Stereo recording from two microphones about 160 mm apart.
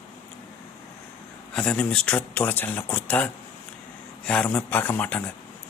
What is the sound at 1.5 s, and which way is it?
A man's voice, 5° left (ahead or behind).